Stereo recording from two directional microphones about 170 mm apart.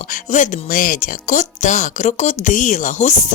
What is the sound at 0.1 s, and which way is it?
Speech, 50° left (ahead or behind).